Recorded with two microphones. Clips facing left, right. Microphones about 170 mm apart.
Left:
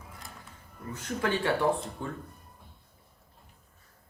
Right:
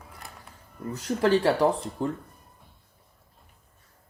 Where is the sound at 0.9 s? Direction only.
35° right (ahead or behind).